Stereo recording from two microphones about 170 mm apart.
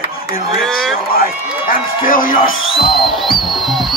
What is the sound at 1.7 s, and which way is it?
Speech, 55° left (ahead or behind).